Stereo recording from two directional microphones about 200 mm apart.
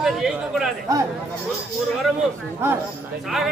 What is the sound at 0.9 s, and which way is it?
Speech, 15° right (ahead or behind).